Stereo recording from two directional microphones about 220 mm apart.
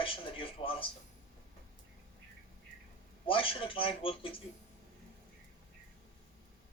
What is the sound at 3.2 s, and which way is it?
Speech, 25° left (ahead or behind).